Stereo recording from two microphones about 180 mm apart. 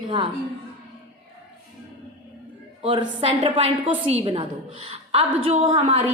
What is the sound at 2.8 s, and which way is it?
A woman's voice, 30° right (ahead or behind).